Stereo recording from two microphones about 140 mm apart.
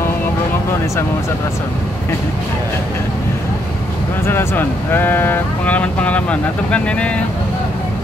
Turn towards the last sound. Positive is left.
turn(degrees=10)  # may be behind; listen again after turning